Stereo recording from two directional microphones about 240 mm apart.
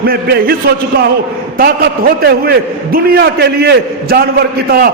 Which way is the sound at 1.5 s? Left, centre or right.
Right.